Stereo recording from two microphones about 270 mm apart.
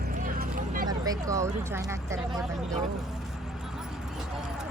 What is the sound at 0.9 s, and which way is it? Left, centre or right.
Speech, centre.